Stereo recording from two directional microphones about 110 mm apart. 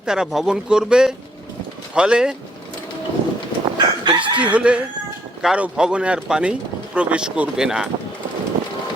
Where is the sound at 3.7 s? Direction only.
45° right (ahead or behind).